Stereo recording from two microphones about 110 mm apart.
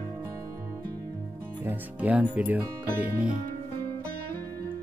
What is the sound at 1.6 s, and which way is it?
Speech, 15° right (ahead or behind).